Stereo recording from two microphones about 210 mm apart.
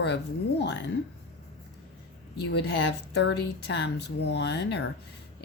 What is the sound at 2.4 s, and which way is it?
A woman's voice, 50° left (ahead or behind).